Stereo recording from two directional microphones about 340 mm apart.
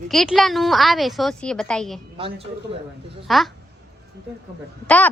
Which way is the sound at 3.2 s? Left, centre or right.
Centre.